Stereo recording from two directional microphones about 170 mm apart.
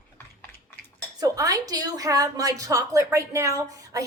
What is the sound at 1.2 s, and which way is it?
A woman's voice, 20° right (ahead or behind).